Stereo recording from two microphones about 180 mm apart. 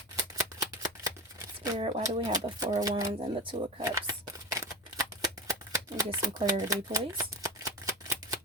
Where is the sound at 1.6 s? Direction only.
20° right (ahead or behind).